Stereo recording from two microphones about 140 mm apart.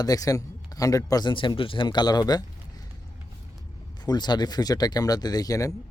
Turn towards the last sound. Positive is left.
turn(degrees=25)  # may be behind; listen again after turning